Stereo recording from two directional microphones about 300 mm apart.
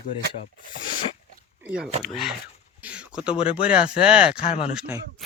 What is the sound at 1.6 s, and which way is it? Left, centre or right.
Speech, centre.